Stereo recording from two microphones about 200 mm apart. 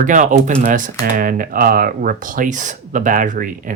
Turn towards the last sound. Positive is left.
turn(degrees=-40)  # may be behind; listen again after turning